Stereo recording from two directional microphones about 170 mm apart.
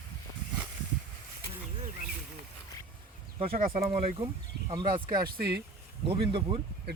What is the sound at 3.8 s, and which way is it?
Speech, 35° right (ahead or behind).